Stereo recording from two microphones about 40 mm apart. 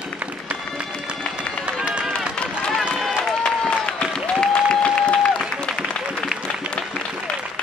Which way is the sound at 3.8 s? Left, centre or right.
Left.